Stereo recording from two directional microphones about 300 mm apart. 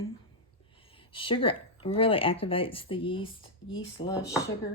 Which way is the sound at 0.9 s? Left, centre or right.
Centre.